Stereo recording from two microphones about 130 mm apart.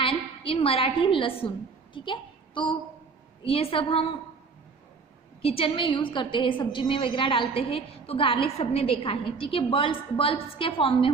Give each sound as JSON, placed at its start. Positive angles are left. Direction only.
{"t": 0.0, "sound": "a woman's voice", "side_deg": 45}
{"t": 3.4, "sound": "a woman's voice", "side_deg": 45}
{"t": 5.4, "sound": "a woman's voice", "side_deg": 45}